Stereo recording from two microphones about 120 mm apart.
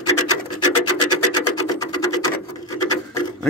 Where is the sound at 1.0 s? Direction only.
35° left (ahead or behind).